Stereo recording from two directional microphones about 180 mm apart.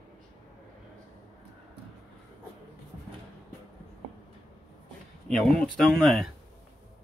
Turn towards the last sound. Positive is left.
turn(degrees=0)  # may be behind; listen again after turning